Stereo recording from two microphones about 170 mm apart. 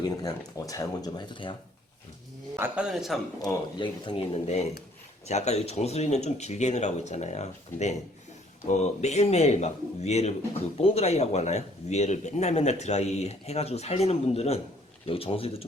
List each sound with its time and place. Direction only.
0.2 s speech: 20° left (ahead or behind)
2.6 s speech: 10° right (ahead or behind)
3.4 s speech: 25° left (ahead or behind)